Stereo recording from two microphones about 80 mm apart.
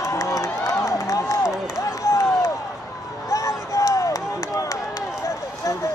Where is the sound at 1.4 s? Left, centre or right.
Centre.